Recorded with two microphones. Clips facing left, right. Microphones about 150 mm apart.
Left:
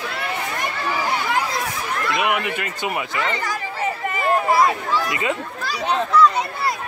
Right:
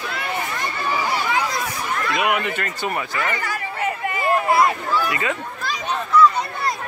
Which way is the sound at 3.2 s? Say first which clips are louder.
Left 1 dB; 25° left (ahead or behind).